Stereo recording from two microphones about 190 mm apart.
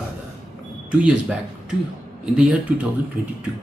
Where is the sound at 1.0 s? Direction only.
5° right (ahead or behind).